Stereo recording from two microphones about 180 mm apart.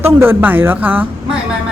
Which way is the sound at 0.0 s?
10° right (ahead or behind).